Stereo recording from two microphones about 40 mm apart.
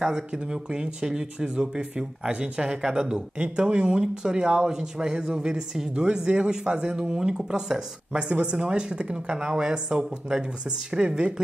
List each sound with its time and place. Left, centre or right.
0.0 s speech: centre
6.0 s speech: right
8.1 s speech: right